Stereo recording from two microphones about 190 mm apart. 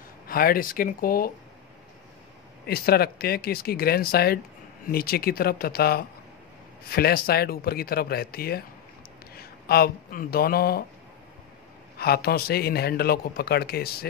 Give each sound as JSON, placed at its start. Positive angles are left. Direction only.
{"t": 0.3, "sound": "speech", "side_deg": 50}
{"t": 2.6, "sound": "speech", "side_deg": 55}
{"t": 12.0, "sound": "speech", "side_deg": 55}